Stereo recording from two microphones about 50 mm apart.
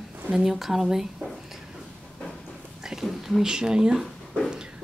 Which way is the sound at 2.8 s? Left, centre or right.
Centre.